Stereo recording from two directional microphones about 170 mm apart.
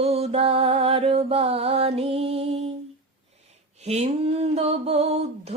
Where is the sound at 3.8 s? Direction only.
40° right (ahead or behind).